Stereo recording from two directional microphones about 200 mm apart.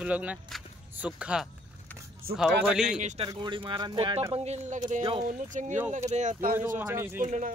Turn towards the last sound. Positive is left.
turn(degrees=-40)  # may be behind; listen again after turning